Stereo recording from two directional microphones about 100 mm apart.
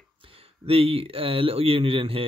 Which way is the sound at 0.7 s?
70° right (ahead or behind).